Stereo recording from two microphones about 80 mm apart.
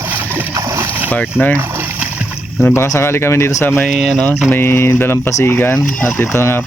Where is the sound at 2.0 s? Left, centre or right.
Centre.